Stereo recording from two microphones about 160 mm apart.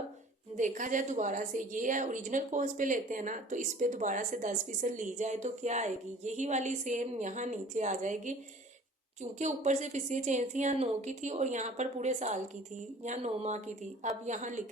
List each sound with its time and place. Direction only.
0.5 s a woman's voice: 50° right (ahead or behind)
9.4 s a woman's voice: 50° right (ahead or behind)